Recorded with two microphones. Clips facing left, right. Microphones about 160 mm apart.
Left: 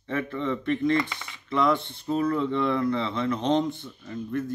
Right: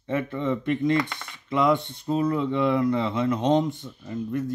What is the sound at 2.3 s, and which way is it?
Speech, 10° right (ahead or behind).